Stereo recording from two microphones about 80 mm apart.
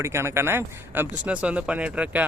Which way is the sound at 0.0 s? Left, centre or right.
Right.